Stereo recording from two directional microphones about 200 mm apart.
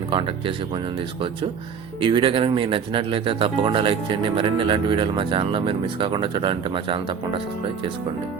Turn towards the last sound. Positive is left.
turn(degrees=-25)  # may be behind; listen again after turning